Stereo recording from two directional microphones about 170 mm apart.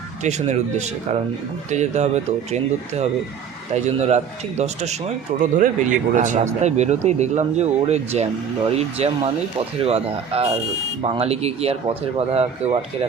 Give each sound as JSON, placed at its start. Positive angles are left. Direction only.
{"t": 0.2, "sound": "speech", "side_deg": -40}